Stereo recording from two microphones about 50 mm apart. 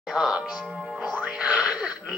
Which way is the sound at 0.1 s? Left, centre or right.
Centre.